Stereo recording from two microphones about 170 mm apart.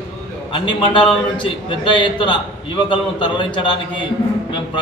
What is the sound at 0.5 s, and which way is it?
A man's voice, 30° left (ahead or behind).